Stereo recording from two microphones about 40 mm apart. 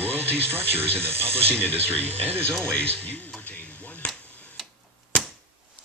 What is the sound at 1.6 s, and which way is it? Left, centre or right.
Speech, right.